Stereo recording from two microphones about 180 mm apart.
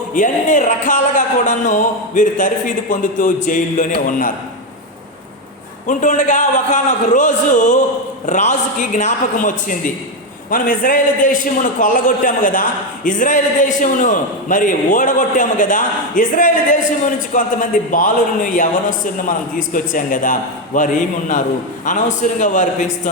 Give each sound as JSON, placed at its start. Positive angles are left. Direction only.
{"t": 0.1, "sound": "a man's voice", "side_deg": 45}
{"t": 5.9, "sound": "a man's voice", "side_deg": 45}